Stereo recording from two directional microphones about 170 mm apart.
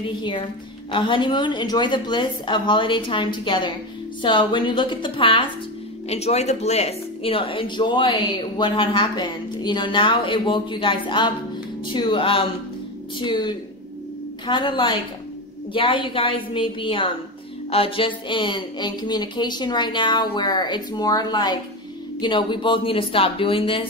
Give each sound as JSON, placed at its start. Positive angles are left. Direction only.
{"t": 0.0, "sound": "speech", "side_deg": 30}